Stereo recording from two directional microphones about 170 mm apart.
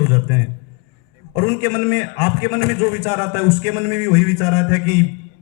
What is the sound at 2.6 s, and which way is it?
A man's voice, 35° left (ahead or behind).